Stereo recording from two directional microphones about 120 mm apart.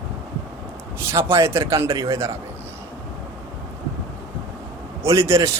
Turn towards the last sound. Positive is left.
turn(degrees=-25)  # may be behind; listen again after turning